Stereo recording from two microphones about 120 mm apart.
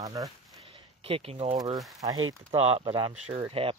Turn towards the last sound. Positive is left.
turn(degrees=-50)  # may be behind; listen again after turning